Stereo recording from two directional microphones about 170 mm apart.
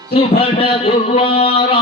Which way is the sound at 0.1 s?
35° left (ahead or behind).